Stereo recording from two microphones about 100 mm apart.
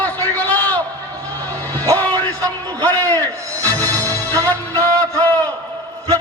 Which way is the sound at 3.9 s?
35° right (ahead or behind).